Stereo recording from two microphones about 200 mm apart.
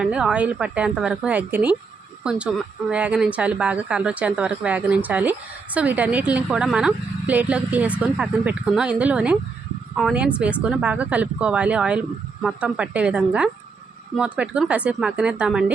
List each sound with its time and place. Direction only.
0.0 s a woman's voice: 5° right (ahead or behind)